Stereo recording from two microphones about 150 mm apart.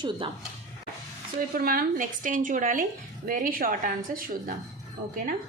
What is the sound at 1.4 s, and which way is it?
A woman's voice, 75° right (ahead or behind).